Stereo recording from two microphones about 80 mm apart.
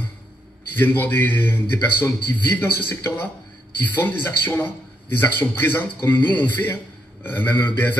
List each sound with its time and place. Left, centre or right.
0.7 s a man's voice: left